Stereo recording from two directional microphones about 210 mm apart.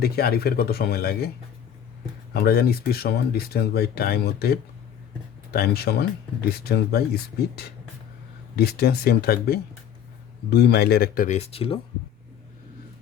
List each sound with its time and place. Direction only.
0.0 s speech: 50° left (ahead or behind)
2.3 s speech: 50° left (ahead or behind); by 11.8 s 30° left (ahead or behind)